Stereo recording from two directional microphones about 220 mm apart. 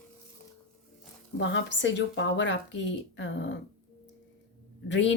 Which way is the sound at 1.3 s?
55° left (ahead or behind).